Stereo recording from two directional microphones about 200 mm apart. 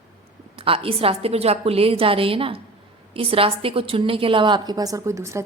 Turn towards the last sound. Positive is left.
turn(degrees=-15)  # may be behind; listen again after turning